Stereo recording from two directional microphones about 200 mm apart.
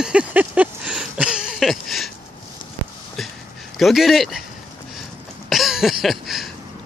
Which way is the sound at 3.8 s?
Centre (ahead or behind).